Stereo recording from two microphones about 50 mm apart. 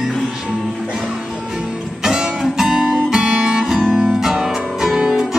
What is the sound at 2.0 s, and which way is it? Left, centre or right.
Music, centre.